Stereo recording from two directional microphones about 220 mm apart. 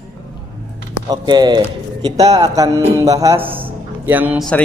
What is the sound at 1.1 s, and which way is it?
A man's voice, 20° right (ahead or behind).